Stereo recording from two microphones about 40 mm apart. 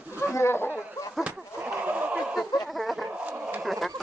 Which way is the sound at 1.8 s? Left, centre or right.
Right.